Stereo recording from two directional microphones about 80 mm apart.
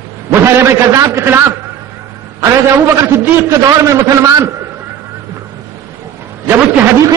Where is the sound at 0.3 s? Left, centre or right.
Right.